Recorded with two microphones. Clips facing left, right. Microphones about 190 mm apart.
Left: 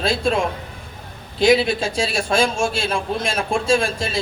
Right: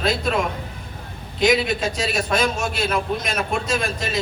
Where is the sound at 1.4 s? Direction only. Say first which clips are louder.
Left 3 dB; 30° left (ahead or behind).